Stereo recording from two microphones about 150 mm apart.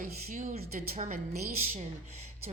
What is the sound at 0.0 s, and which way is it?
A woman's voice, 55° right (ahead or behind).